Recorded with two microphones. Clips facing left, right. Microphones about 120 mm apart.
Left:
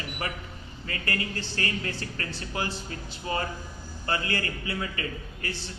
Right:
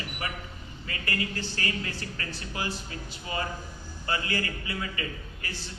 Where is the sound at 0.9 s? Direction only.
30° left (ahead or behind).